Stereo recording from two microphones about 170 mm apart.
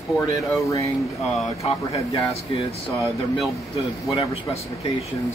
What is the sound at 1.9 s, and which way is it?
Speech, 35° left (ahead or behind).